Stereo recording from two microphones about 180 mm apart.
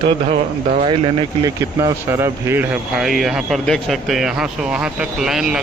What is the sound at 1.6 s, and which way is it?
A man's voice, 15° right (ahead or behind).